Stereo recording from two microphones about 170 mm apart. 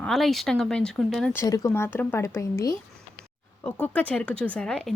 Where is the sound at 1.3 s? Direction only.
15° left (ahead or behind).